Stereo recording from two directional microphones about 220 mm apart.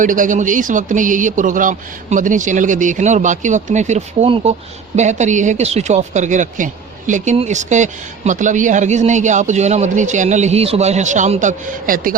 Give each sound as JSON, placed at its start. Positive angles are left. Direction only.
{"t": 0.0, "sound": "speech", "side_deg": -35}